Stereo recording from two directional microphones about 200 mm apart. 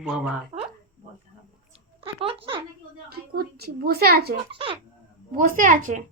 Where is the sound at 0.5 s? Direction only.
25° right (ahead or behind).